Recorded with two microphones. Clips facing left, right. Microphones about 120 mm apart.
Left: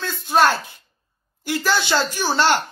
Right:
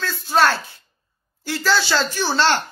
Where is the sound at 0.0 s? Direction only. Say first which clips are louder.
Left 1 dB; 20° left (ahead or behind).